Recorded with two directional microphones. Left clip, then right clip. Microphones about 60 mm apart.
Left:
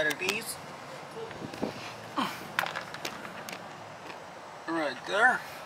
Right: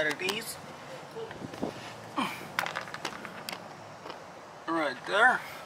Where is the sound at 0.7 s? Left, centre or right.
Centre.